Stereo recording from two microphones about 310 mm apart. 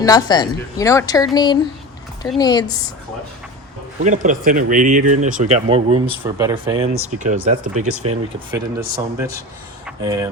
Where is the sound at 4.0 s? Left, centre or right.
Right.